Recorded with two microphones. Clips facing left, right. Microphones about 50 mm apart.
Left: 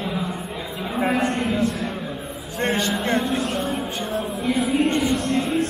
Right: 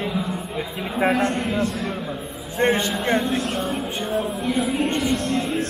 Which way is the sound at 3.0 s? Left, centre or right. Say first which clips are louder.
Right 1 dB; centre.